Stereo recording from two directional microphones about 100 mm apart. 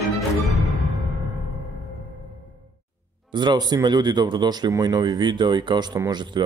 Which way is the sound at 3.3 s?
45° right (ahead or behind).